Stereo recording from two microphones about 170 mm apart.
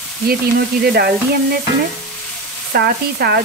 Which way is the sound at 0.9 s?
65° right (ahead or behind).